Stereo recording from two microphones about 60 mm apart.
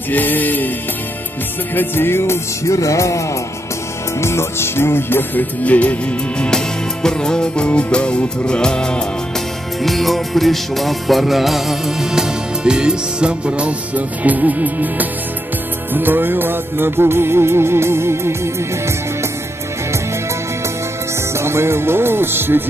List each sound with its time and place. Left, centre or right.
0.1 s music: left
1.8 s music: left
4.2 s music: left
5.6 s music: left
6.4 s music: centre
9.8 s music: centre; by 18.9 s right
21.4 s music: right